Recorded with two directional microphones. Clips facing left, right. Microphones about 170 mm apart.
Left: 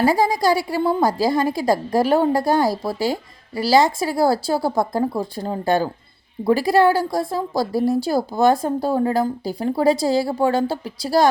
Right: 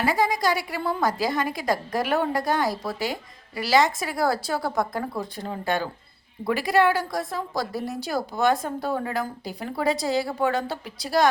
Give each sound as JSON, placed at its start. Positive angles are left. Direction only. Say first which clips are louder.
{"t": 0.0, "sound": "a woman's voice", "louder": "left 5 dB", "side_deg": 35}